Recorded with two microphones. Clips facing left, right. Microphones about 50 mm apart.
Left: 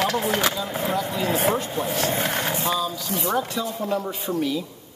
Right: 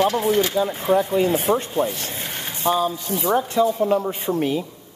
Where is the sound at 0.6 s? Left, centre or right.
Right.